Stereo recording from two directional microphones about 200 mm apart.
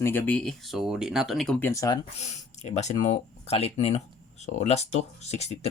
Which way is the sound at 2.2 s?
35° left (ahead or behind).